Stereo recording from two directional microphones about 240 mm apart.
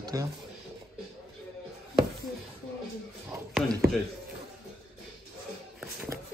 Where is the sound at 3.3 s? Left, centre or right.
Centre.